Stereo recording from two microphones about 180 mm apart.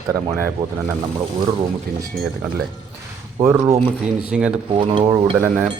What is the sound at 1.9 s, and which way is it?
Speech, 60° right (ahead or behind).